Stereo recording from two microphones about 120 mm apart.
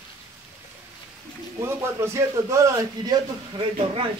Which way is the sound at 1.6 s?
25° right (ahead or behind).